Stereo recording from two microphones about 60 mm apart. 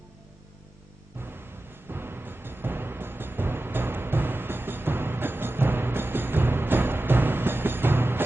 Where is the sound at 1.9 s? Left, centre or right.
Right.